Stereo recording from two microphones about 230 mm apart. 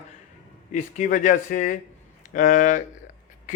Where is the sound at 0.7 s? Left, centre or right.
Left.